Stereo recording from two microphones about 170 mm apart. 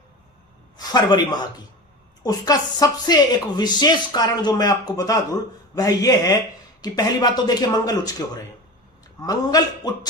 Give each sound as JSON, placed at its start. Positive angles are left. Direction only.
{"t": 0.8, "sound": "speech", "side_deg": 25}
{"t": 9.2, "sound": "speech", "side_deg": 20}